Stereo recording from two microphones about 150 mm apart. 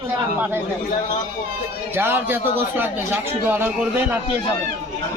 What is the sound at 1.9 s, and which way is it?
A man's voice, 15° right (ahead or behind).